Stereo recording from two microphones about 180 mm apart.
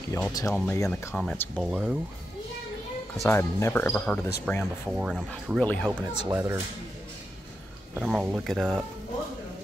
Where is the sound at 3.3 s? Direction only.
15° left (ahead or behind).